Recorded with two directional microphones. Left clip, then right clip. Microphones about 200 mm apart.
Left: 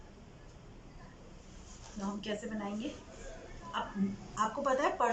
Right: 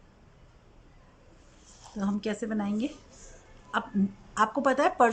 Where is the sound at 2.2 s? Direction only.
55° right (ahead or behind).